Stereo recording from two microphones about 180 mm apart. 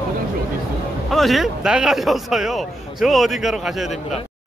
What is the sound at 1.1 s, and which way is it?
Speech, centre (ahead or behind).